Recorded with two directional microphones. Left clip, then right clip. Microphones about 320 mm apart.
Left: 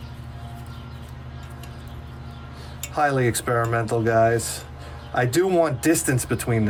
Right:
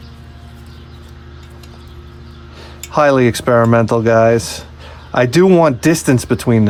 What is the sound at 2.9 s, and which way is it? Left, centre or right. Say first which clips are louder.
Speech: right 10 dB; centre.